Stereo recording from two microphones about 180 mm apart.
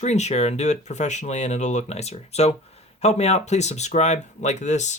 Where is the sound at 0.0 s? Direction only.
40° left (ahead or behind).